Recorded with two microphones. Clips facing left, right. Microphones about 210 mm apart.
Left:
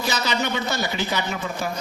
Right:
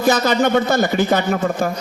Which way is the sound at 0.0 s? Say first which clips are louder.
Right 10 dB; 50° right (ahead or behind).